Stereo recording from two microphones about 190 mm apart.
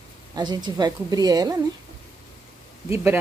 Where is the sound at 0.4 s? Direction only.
20° right (ahead or behind).